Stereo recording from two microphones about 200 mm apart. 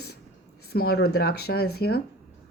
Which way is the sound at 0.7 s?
50° left (ahead or behind).